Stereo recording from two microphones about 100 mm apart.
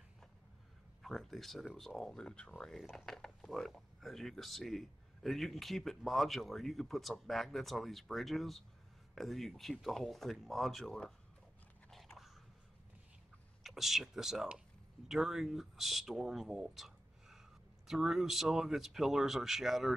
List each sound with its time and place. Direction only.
1.0 s speech: centre (ahead or behind)
11.9 s biting: centre (ahead or behind)
13.6 s speech: centre (ahead or behind)